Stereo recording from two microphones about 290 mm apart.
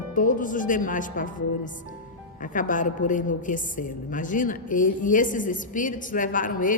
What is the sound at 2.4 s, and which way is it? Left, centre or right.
Speech, left.